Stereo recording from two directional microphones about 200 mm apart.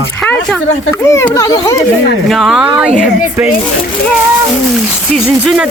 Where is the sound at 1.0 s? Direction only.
15° left (ahead or behind).